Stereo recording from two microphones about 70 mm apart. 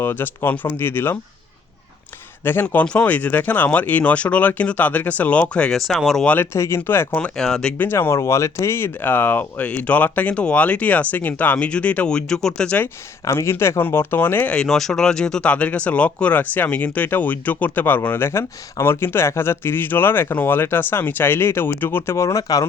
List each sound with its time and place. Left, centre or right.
0.0 s speech: left
2.4 s speech: left
2.8 s speech: centre
6.4 s speech: left
7.3 s speech: centre
7.8 s speech: left; by 12.7 s centre
13.2 s speech: left
14.5 s speech: centre; by 22.6 s left